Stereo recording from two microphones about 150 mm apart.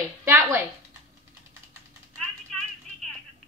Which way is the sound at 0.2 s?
15° right (ahead or behind).